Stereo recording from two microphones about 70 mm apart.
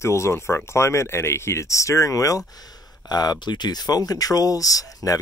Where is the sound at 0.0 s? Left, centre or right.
Left.